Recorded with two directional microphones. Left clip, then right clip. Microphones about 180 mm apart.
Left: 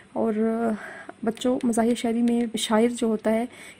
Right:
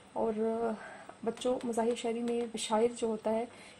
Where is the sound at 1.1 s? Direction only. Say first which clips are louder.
Left 9 dB; 20° left (ahead or behind).